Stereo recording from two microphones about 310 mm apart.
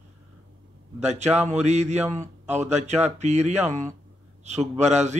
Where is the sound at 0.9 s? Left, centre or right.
Right.